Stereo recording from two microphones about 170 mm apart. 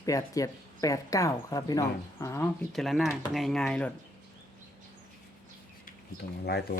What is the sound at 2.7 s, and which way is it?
Speech, centre (ahead or behind).